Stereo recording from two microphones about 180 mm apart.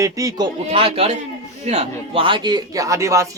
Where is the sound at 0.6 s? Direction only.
30° right (ahead or behind).